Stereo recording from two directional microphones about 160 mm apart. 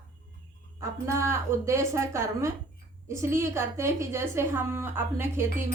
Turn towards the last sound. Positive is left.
turn(degrees=-15)  # may be behind; listen again after turning